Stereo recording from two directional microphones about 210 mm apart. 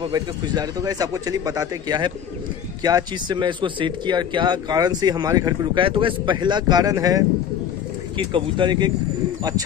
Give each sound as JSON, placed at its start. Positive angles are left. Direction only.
{"t": 0.0, "sound": "a man's voice", "side_deg": -20}